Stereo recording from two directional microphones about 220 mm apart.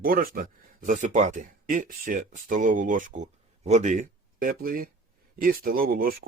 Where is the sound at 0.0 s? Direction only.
40° right (ahead or behind).